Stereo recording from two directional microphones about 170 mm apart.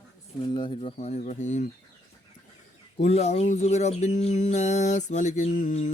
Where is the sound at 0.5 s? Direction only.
30° left (ahead or behind).